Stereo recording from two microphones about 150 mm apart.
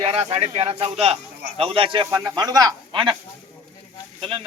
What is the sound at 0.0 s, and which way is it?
Speech, 40° right (ahead or behind).